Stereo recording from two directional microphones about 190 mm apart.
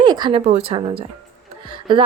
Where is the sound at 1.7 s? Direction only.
25° right (ahead or behind).